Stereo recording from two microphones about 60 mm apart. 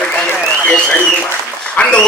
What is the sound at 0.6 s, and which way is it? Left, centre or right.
Speech, centre.